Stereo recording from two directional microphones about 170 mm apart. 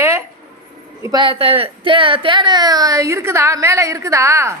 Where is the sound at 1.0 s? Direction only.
25° right (ahead or behind).